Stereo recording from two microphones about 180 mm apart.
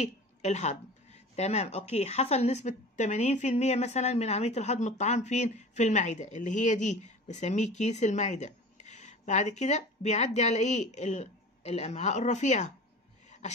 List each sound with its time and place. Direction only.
0.0 s speech: 40° left (ahead or behind)